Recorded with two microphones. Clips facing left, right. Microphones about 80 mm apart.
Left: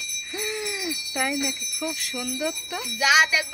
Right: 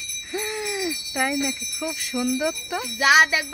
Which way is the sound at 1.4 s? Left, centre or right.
Centre.